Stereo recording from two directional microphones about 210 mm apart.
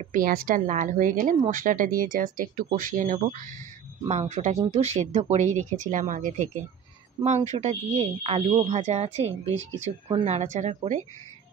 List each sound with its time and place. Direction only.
0.0 s a woman's voice: 40° right (ahead or behind)